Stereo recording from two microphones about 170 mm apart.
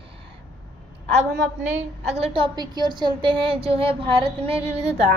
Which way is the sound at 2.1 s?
35° right (ahead or behind).